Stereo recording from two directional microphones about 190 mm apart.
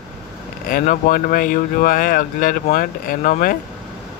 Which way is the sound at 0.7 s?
45° left (ahead or behind).